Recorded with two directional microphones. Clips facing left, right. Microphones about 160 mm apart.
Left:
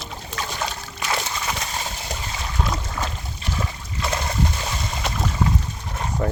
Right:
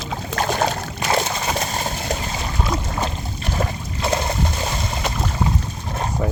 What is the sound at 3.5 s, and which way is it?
Boat, 50° right (ahead or behind).